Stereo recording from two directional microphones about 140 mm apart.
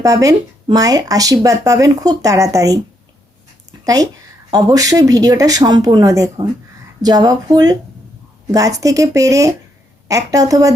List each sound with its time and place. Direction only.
0.0 s speech: 25° right (ahead or behind)
3.7 s a sound: 25° right (ahead or behind)
4.5 s speech: 25° right (ahead or behind)